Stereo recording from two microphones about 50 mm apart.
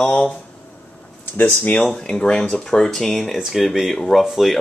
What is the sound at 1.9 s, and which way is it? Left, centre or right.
Speech, centre.